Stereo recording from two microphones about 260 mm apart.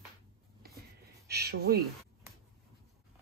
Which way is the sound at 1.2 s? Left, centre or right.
Right.